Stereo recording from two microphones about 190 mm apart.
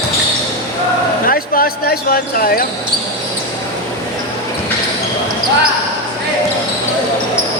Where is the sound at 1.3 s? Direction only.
50° left (ahead or behind).